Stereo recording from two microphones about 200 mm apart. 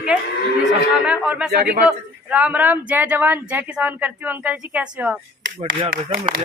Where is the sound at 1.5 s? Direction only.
50° right (ahead or behind).